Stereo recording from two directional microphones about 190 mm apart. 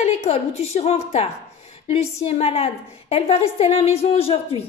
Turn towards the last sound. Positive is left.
turn(degrees=30)  # may be behind; listen again after turning